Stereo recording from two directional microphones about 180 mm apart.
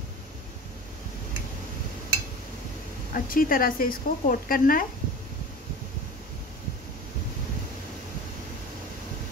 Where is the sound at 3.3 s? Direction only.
50° left (ahead or behind).